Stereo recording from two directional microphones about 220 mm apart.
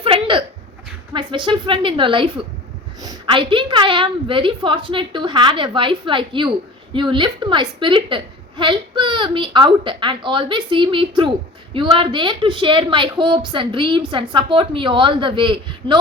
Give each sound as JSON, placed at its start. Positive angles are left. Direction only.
{"t": 0.0, "sound": "hiccup", "side_deg": -25}
{"t": 1.1, "sound": "a woman's voice", "side_deg": -20}